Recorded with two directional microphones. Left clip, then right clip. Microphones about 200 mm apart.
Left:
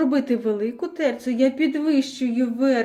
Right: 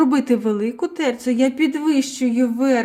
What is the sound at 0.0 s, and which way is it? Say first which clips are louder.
Speech: right 4 dB; 55° right (ahead or behind).